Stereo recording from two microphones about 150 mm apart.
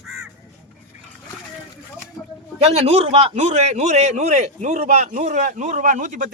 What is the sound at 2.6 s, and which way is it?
A man's voice, 45° right (ahead or behind).